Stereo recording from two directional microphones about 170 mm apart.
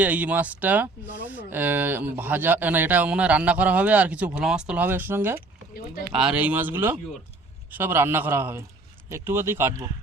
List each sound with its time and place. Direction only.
0.0 s speech: 10° right (ahead or behind)